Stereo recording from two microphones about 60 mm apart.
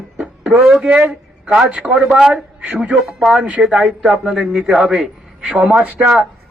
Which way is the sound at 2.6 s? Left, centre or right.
Right.